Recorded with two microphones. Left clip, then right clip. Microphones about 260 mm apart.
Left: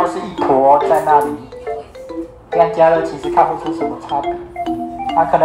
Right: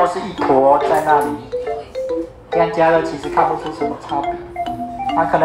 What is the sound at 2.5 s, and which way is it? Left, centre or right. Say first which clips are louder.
Speech: left 3 dB; left.